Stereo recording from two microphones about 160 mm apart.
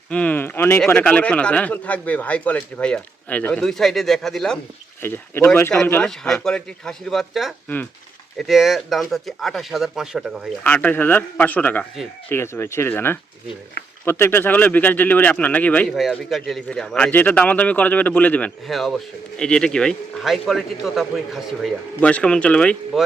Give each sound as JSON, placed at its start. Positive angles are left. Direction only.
{"t": 0.1, "sound": "speech", "side_deg": 10}
{"t": 5.0, "sound": "speech", "side_deg": 15}
{"t": 10.6, "sound": "speech", "side_deg": 10}
{"t": 16.0, "sound": "speech", "side_deg": 0}